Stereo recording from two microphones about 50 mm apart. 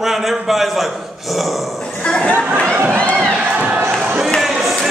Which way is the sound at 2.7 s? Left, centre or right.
Right.